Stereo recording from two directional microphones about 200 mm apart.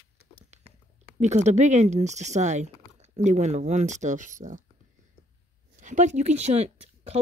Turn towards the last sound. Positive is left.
turn(degrees=-30)  # may be behind; listen again after turning